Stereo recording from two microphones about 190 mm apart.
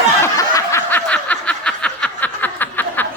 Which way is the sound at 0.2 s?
15° left (ahead or behind).